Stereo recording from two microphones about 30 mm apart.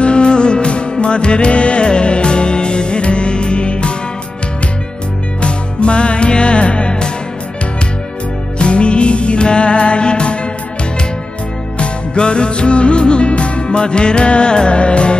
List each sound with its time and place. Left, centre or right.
0.0 s music: left
5.4 s music: left
8.5 s music: left
11.8 s music: left